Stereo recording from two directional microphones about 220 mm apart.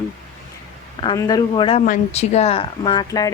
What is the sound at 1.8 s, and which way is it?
A woman's voice, 35° left (ahead or behind).